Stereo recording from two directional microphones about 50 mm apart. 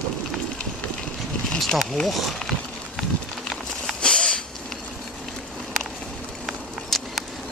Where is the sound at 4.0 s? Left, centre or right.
Centre.